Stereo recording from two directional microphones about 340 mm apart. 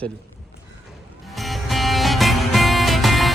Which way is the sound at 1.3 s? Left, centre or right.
Centre.